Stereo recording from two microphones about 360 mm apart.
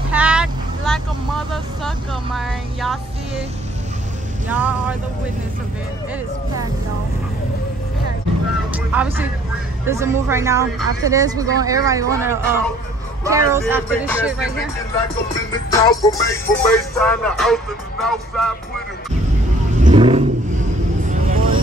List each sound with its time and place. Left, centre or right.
0.1 s vehicle: centre
1.5 s speech: centre
4.5 s music: centre
8.7 s music: centre
9.8 s speech: centre
14.0 s music: centre
15.7 s music: centre
19.8 s vehicle: centre